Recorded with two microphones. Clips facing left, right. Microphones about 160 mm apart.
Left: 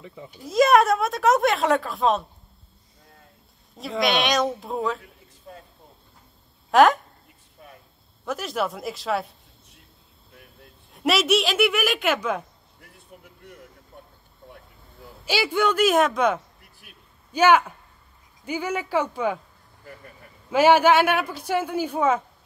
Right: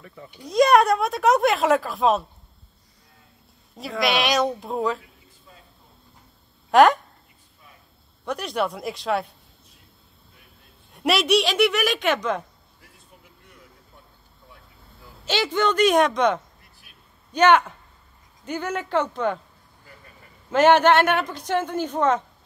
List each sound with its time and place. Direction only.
0.0 s speech: 15° left (ahead or behind)
0.4 s speech: centre (ahead or behind)
4.0 s speech: centre (ahead or behind)
5.5 s a sound: 55° left (ahead or behind)
6.7 s speech: centre (ahead or behind)
8.3 s speech: centre (ahead or behind)
10.9 s speech: centre (ahead or behind)
12.8 s vehicle: 55° left (ahead or behind)
15.2 s speech: 10° left (ahead or behind)
20.5 s speech: 10° left (ahead or behind)